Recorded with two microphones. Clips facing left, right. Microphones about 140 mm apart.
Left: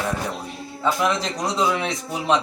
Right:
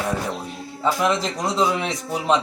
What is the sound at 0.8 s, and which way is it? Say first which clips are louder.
A man's voice: right 1 dB; 5° right (ahead or behind).